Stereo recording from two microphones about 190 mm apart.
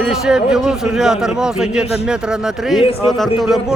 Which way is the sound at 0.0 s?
Centre (ahead or behind).